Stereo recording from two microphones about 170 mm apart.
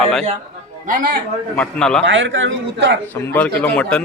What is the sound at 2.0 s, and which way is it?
Speech, 90° right.